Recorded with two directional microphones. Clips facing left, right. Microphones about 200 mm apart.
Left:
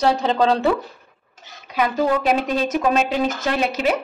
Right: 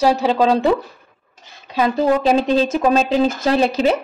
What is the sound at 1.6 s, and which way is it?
A woman's voice, 30° right (ahead or behind).